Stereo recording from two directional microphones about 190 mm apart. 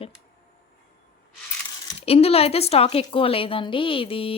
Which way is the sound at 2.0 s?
30° left (ahead or behind).